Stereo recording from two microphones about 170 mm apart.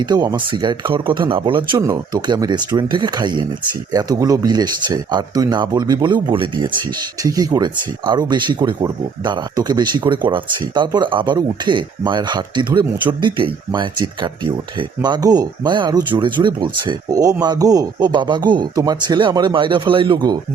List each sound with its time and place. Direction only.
0.0 s speech: 25° right (ahead or behind)